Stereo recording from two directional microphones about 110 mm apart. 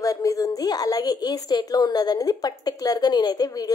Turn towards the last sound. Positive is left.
turn(degrees=35)  # may be behind; listen again after turning